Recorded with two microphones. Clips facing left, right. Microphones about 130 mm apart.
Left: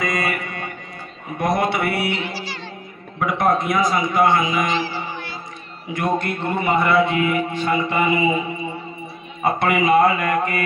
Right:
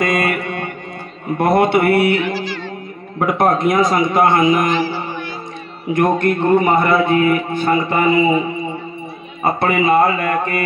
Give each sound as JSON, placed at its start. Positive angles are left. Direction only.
{"t": 0.0, "sound": "mantra", "side_deg": -75}
{"t": 1.4, "sound": "a sound", "side_deg": -60}
{"t": 3.2, "sound": "a man's voice", "side_deg": -55}
{"t": 9.4, "sound": "speech", "side_deg": -30}